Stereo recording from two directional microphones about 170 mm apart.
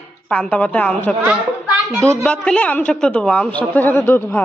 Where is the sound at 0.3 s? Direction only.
10° left (ahead or behind).